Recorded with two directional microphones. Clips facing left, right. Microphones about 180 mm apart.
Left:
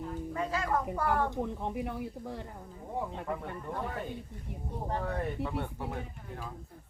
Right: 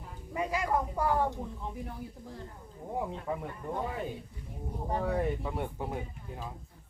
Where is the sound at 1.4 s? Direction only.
65° left (ahead or behind).